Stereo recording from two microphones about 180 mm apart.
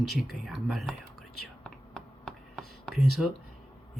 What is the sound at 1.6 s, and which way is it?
Whispering, 5° left (ahead or behind).